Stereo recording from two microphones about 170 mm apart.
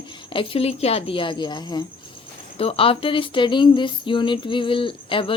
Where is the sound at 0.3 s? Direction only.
35° left (ahead or behind).